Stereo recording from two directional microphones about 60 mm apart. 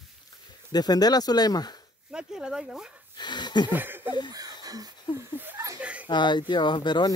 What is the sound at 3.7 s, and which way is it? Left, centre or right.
Speech, right.